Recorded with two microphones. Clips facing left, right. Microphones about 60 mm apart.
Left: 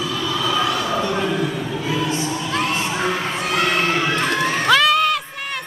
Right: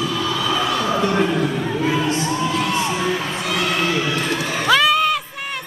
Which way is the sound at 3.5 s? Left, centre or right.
Left.